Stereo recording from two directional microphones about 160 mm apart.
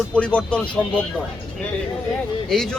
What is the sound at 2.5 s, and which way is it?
Speech, centre (ahead or behind).